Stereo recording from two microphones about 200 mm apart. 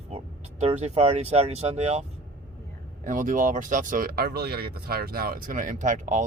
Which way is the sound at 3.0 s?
40° right (ahead or behind).